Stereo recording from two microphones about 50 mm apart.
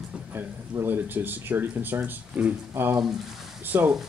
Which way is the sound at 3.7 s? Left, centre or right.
Right.